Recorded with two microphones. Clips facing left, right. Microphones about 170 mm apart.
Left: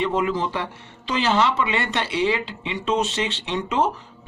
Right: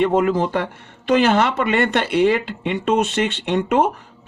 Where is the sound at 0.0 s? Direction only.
45° right (ahead or behind).